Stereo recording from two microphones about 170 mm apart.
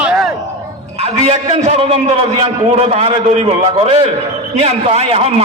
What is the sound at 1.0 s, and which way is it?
A man's voice, 40° right (ahead or behind).